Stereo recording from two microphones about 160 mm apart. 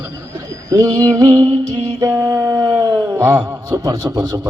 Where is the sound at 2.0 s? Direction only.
20° right (ahead or behind).